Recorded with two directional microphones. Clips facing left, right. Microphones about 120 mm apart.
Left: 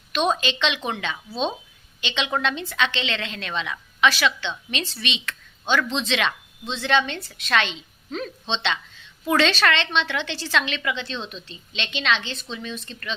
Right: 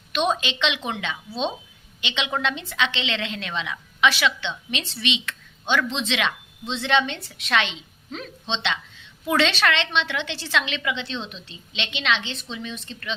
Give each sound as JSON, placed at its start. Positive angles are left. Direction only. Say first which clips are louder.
{"t": 0.1, "sound": "a woman's voice", "louder": "left 1 dB", "side_deg": -15}